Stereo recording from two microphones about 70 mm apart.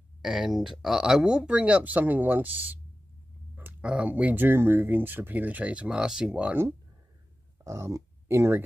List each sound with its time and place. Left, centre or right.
0.2 s speech: centre; by 2.8 s right
3.8 s speech: centre
4.4 s speech: right; by 6.5 s centre
7.6 s speech: right